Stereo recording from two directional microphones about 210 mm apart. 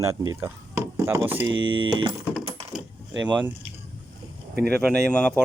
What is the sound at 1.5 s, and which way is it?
Speech, 65° right (ahead or behind).